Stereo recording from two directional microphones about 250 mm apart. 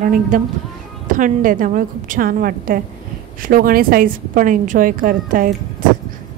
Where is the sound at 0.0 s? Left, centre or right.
Right.